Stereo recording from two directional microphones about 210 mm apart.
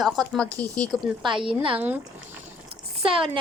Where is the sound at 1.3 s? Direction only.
25° right (ahead or behind).